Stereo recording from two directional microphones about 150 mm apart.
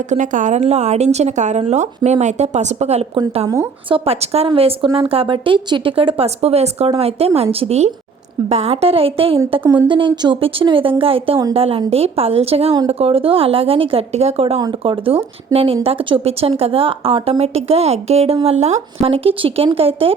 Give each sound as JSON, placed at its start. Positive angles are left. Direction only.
{"t": 0.1, "sound": "a woman's voice", "side_deg": -55}
{"t": 3.8, "sound": "speech", "side_deg": -40}